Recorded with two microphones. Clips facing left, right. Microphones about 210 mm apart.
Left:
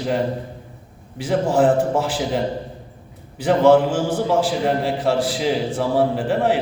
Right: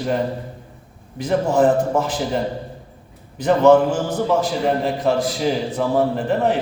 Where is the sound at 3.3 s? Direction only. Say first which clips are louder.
Right 1 dB; 10° left (ahead or behind).